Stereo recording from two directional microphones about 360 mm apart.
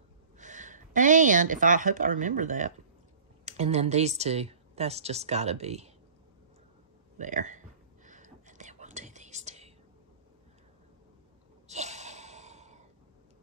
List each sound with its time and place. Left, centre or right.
0.4 s speech: right
7.2 s whispering: right
11.6 s sigh: centre